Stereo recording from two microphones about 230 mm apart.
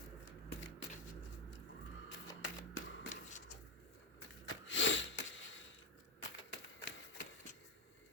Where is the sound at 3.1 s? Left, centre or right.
Left.